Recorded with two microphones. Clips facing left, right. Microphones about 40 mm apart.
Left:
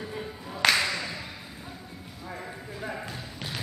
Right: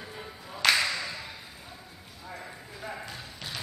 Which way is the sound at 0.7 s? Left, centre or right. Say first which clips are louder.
Left 1 dB; centre.